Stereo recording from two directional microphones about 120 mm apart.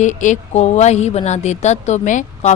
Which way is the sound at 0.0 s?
90° left.